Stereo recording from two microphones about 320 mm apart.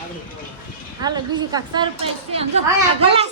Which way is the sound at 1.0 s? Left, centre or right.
Centre.